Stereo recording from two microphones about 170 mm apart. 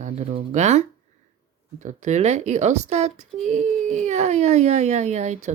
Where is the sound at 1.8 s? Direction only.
45° right (ahead or behind).